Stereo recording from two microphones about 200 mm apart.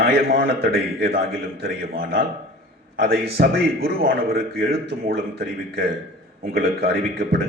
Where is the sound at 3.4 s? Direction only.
50° right (ahead or behind).